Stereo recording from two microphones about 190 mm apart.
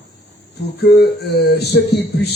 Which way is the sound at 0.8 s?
60° left (ahead or behind).